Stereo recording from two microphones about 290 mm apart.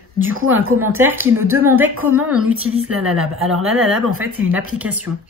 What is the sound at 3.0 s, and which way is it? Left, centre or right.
Speech, centre.